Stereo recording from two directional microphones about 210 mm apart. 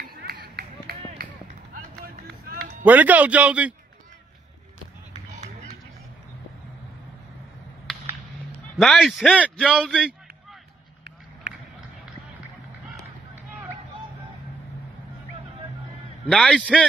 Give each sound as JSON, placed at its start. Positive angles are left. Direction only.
{"t": 0.0, "sound": "run", "side_deg": -50}
{"t": 2.8, "sound": "a man's voice", "side_deg": -10}
{"t": 5.3, "sound": "run", "side_deg": -35}
{"t": 8.7, "sound": "a man's voice", "side_deg": 0}
{"t": 12.9, "sound": "run", "side_deg": -10}
{"t": 16.3, "sound": "a man's voice", "side_deg": 5}